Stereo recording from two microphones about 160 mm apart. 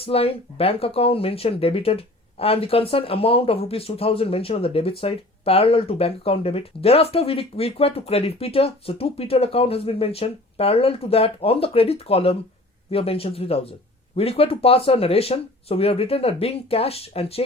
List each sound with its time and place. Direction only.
0.0 s speech: 35° left (ahead or behind)